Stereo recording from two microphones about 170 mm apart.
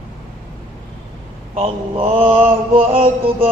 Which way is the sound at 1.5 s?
35° right (ahead or behind).